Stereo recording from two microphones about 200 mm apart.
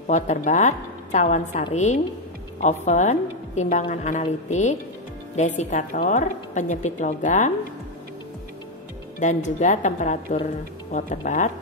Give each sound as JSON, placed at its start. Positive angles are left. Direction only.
{"t": 0.0, "sound": "a woman's voice", "side_deg": 40}
{"t": 9.2, "sound": "a woman's voice", "side_deg": 35}